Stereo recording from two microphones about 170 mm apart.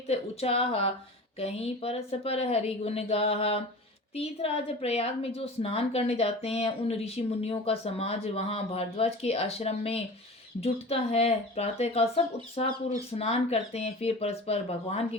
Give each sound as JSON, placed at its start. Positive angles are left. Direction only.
{"t": 0.1, "sound": "a woman's voice", "side_deg": 35}